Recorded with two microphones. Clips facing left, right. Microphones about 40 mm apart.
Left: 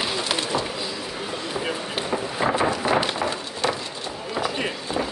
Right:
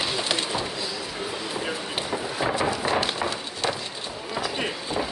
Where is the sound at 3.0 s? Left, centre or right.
Centre.